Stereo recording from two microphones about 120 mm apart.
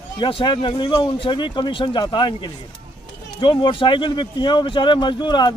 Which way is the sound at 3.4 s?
45° left (ahead or behind).